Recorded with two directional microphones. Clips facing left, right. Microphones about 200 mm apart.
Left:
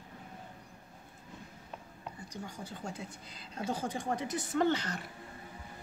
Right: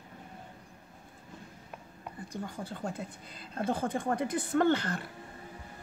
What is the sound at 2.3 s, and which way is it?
A woman's voice, 55° right (ahead or behind).